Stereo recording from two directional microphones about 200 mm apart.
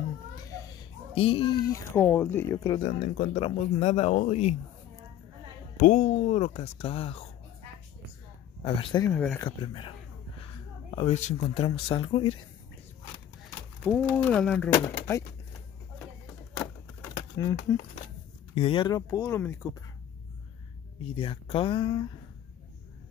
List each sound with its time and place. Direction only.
1.1 s speech: 25° left (ahead or behind)
2.0 s speech: 10° left (ahead or behind)
2.8 s speech: 35° left (ahead or behind)
5.8 s speech: 40° left (ahead or behind)
8.6 s speech: 25° left (ahead or behind)
9.1 s speech: 10° left (ahead or behind)
9.6 s speech: 25° left (ahead or behind)
13.8 s speech: 5° left (ahead or behind)
14.7 s speech: 15° left (ahead or behind)
17.4 s speech: 15° left (ahead or behind)
18.5 s speech: 30° left (ahead or behind)
21.0 s speech: 25° left (ahead or behind)